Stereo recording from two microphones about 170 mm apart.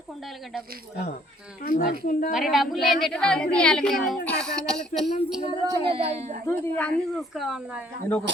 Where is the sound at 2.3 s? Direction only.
Centre (ahead or behind).